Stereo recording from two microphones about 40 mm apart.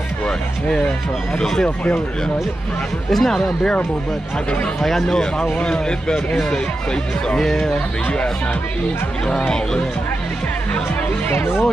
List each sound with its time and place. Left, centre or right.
1.4 s speech: centre
3.1 s speech: centre
4.8 s speech: centre
5.1 s speech: left
7.3 s speech: centre
11.2 s speech: left